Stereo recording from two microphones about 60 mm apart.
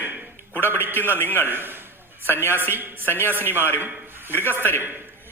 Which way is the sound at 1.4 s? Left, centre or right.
Right.